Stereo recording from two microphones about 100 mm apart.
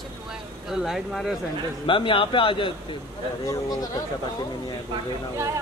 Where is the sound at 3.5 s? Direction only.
40° left (ahead or behind).